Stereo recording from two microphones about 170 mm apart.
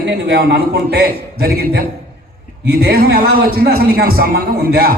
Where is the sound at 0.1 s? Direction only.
90° right.